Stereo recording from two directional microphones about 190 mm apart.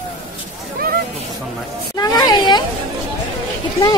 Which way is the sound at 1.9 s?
20° left (ahead or behind).